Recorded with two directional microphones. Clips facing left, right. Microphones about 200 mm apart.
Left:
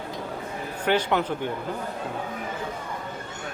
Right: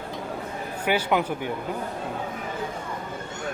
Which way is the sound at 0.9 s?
10° right (ahead or behind).